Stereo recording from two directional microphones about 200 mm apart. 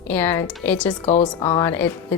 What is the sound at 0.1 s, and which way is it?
Speech, 10° left (ahead or behind).